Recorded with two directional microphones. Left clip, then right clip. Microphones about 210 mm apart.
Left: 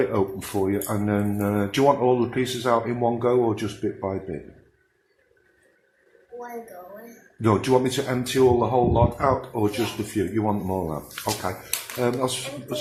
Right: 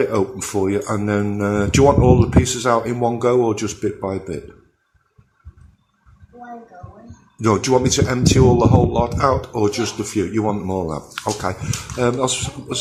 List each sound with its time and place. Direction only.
0.0 s speech: 15° right (ahead or behind)
7.4 s speech: 15° right (ahead or behind)